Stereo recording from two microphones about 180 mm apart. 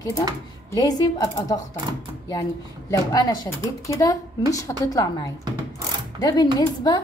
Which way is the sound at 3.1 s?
20° left (ahead or behind).